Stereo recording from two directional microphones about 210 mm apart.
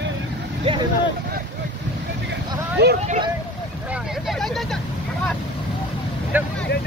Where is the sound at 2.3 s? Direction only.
55° right (ahead or behind).